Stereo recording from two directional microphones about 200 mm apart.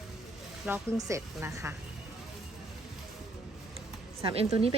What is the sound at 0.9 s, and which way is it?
Speech, 15° right (ahead or behind).